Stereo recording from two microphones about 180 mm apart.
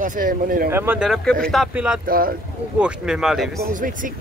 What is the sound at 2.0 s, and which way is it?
Speech, 55° right (ahead or behind).